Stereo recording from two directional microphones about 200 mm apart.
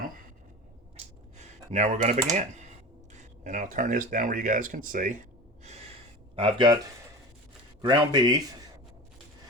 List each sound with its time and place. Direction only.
0.9 s a sound: 35° right (ahead or behind)
2.3 s speech: 35° right (ahead or behind)
6.3 s a man's voice: 25° right (ahead or behind)
7.8 s a man's voice: 20° right (ahead or behind)